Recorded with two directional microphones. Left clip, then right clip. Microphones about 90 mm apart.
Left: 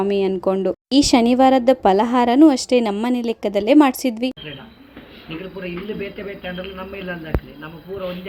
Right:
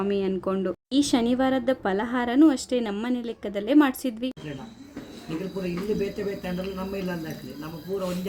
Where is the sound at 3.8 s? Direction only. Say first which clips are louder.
Left 8 dB; 60° left (ahead or behind).